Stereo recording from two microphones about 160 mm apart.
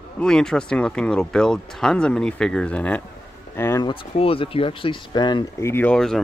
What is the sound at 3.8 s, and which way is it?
Speech, 35° left (ahead or behind).